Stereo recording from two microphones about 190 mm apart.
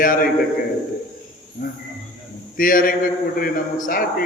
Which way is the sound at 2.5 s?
45° left (ahead or behind).